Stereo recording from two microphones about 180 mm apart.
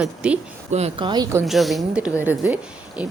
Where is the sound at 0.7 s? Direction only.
30° right (ahead or behind).